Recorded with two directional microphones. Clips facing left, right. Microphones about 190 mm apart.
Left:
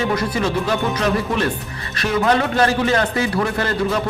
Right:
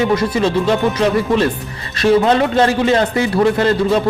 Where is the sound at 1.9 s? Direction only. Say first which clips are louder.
Right 6 dB; 30° right (ahead or behind).